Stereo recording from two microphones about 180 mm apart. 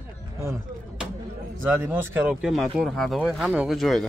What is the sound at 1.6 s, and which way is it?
Speech, 10° right (ahead or behind).